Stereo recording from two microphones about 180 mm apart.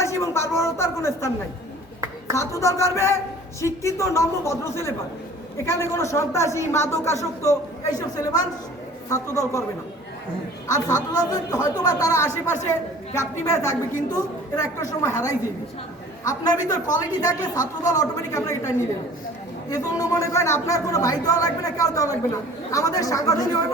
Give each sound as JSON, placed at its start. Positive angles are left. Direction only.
{"t": 0.0, "sound": "a sound", "side_deg": 15}
{"t": 2.3, "sound": "a woman's voice", "side_deg": 15}
{"t": 10.7, "sound": "a woman's voice", "side_deg": 20}
{"t": 19.7, "sound": "speech", "side_deg": 20}